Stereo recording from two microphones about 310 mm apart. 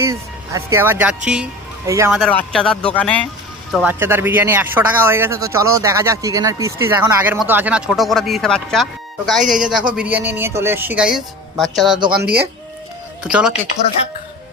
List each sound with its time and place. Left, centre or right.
0.0 s speech: centre
12.2 s speech: right
13.2 s speech: centre